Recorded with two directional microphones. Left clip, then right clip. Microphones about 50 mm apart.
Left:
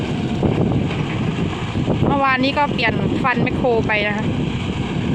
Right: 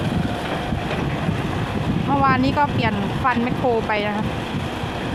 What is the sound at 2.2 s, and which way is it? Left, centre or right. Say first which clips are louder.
Speech: even; left.